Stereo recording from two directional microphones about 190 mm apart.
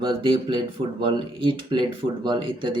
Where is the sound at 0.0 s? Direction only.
25° right (ahead or behind).